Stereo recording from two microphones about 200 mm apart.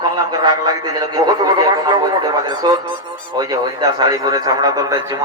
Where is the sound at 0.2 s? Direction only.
20° right (ahead or behind).